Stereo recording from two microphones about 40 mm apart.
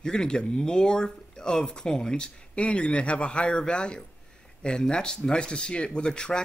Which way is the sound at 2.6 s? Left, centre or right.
Left.